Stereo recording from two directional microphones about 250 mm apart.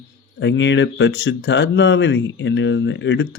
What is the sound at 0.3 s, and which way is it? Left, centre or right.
Speech, left.